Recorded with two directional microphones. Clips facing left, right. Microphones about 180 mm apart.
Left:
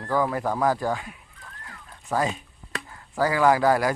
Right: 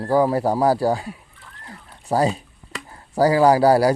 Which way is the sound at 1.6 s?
35° right (ahead or behind).